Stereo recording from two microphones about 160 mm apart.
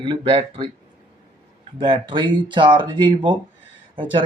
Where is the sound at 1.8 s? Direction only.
30° right (ahead or behind).